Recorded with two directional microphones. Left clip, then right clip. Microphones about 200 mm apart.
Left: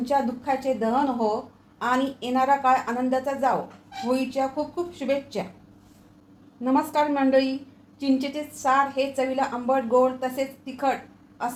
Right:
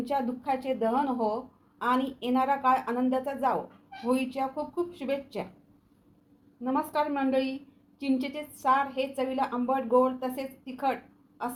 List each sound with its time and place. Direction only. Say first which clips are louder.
0.0 s a woman's voice: left 6 dB; 25° right (ahead or behind)
6.6 s a woman's voice: left 6 dB; 5° right (ahead or behind)
7.1 s a woman's voice: left 7 dB; 20° right (ahead or behind)